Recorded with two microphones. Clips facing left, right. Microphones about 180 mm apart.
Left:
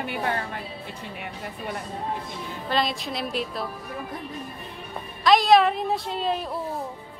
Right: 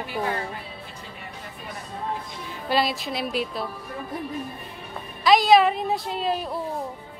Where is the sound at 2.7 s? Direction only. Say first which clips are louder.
Right 2 dB; 5° right (ahead or behind).